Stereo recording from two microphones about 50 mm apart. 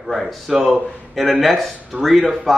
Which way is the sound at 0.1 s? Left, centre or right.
Centre.